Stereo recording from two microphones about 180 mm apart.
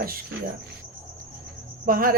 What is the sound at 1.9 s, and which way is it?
Cricket, 50° right (ahead or behind).